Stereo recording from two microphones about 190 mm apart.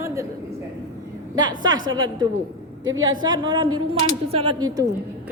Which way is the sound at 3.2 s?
25° right (ahead or behind).